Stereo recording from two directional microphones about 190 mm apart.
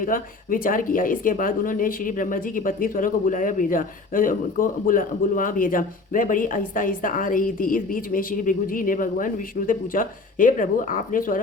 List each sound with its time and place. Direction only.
0.0 s speech: 45° left (ahead or behind)